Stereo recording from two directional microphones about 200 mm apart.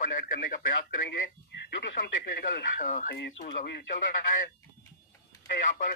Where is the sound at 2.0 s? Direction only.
55° left (ahead or behind).